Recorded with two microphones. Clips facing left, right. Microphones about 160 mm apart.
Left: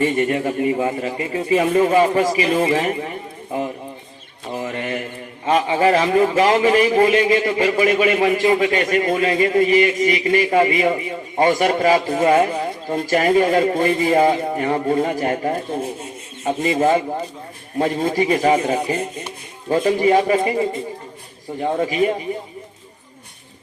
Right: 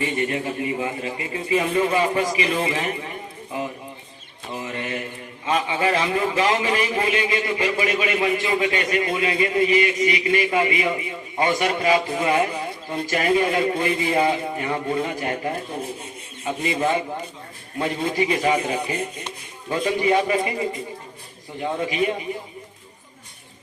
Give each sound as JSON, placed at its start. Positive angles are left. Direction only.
{"t": 0.0, "sound": "a man's voice", "side_deg": 45}
{"t": 4.5, "sound": "mantra", "side_deg": 45}
{"t": 5.5, "sound": "a man's voice", "side_deg": 45}